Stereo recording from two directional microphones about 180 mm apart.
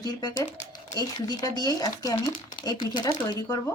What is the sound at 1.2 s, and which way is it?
Speech, 20° left (ahead or behind).